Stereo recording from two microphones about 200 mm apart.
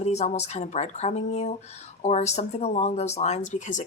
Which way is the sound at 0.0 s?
35° left (ahead or behind).